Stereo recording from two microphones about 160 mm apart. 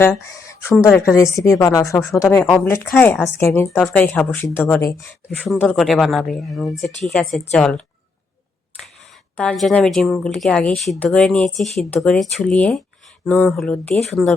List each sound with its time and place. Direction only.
0.0 s a woman's voice: 15° left (ahead or behind)
2.4 s speech: 5° left (ahead or behind)
5.6 s speech: centre (ahead or behind)
9.4 s speech: 5° left (ahead or behind)